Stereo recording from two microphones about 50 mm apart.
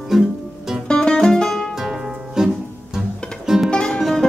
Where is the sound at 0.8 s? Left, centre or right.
Centre.